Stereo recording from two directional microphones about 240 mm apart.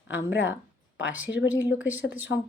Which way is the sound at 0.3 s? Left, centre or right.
Centre.